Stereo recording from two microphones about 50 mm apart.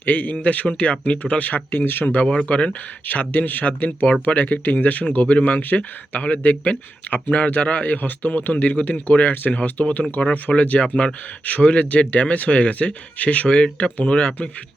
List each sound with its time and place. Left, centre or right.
0.0 s speech: left
2.5 s speech: left
3.1 s speech: left
4.0 s speech: left
10.0 s speech: left